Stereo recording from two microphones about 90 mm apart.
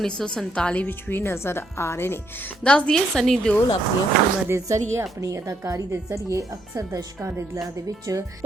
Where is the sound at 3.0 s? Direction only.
5° left (ahead or behind).